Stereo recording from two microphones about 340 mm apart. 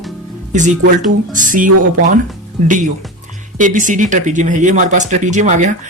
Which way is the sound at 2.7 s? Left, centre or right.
Right.